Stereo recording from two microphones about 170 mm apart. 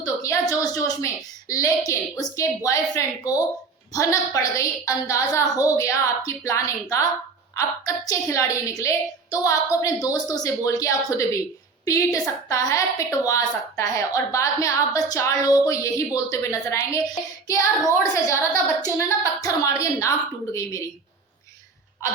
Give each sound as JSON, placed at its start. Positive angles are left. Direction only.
{"t": 0.0, "sound": "a woman's voice", "side_deg": 20}